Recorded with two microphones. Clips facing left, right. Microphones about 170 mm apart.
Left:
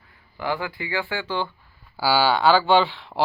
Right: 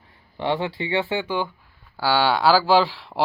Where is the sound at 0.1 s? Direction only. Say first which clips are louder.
Right 3 dB; 25° right (ahead or behind).